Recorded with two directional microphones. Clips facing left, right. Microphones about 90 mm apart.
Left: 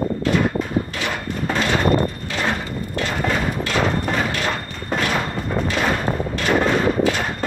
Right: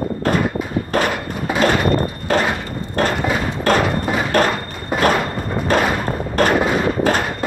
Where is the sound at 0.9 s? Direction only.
45° right (ahead or behind).